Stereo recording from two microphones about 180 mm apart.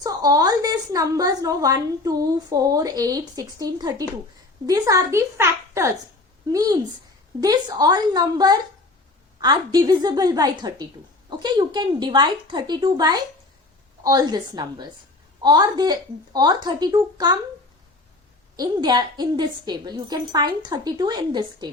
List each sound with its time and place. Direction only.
0.0 s a woman's voice: 20° right (ahead or behind)
18.5 s a woman's voice: 20° right (ahead or behind)